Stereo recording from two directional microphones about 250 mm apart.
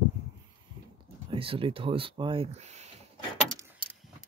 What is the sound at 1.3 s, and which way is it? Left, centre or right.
Speech, right.